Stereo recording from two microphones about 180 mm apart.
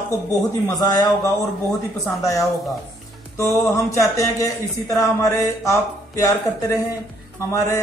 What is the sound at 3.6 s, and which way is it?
Speech, 15° left (ahead or behind).